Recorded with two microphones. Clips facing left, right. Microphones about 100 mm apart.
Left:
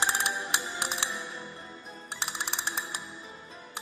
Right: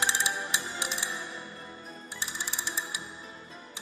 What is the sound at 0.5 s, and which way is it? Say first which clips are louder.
Music: left 2 dB; 60° left (ahead or behind).